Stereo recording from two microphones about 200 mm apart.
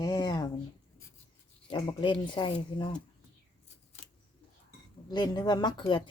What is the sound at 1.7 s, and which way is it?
Speech, 20° left (ahead or behind).